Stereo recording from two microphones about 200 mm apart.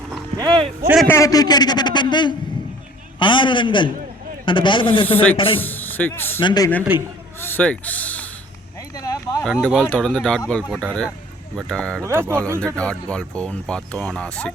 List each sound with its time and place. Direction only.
0.3 s speech: 20° right (ahead or behind)
1.0 s a man's voice: 15° left (ahead or behind)
5.0 s speech: 10° left (ahead or behind)
6.4 s a man's voice: 20° left (ahead or behind)
6.9 s speech: 10° right (ahead or behind)
7.3 s speech: 10° left (ahead or behind)
9.0 s a sound: 15° left (ahead or behind)
9.4 s speech: 5° left (ahead or behind)
12.0 s speech: 15° right (ahead or behind)
12.5 s speech: 5° left (ahead or behind)